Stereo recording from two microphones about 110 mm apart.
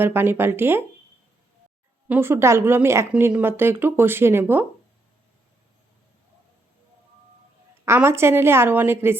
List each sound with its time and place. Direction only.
0.0 s speech: 20° right (ahead or behind)
2.0 s speech: 20° right (ahead or behind)
7.9 s speech: 25° right (ahead or behind)